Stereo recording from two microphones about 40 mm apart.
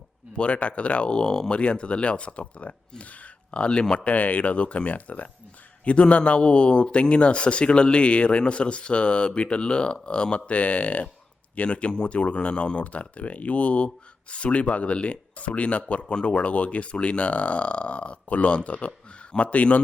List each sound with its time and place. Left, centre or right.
0.3 s a man's voice: left
1.5 s a man's voice: left
4.0 s a man's voice: left